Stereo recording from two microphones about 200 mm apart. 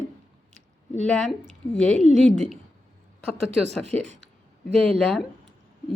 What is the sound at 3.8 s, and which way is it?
Speech, 35° right (ahead or behind).